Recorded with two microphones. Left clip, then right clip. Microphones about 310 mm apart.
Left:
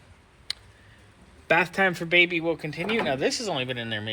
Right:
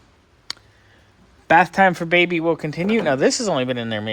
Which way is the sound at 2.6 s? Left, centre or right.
Right.